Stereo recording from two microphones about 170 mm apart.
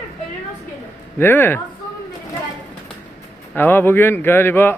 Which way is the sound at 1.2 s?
10° left (ahead or behind).